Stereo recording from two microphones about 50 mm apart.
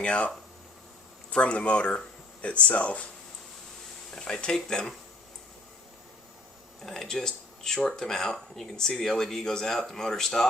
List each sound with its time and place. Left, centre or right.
0.0 s speech: left
1.3 s speech: left
4.1 s speech: centre
6.8 s speech: centre